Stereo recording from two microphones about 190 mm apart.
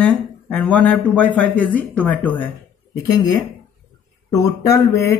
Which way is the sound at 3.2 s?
20° left (ahead or behind).